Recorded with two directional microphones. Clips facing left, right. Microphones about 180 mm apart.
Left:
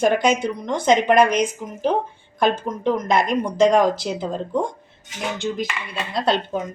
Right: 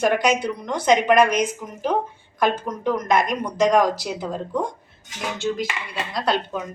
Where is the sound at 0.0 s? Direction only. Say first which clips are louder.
Left 2 dB; 25° left (ahead or behind).